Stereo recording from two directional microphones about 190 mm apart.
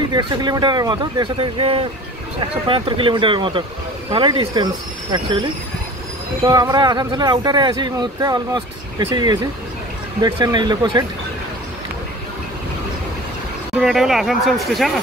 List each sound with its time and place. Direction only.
0.1 s speech: 20° right (ahead or behind)
13.7 s speech: centre (ahead or behind)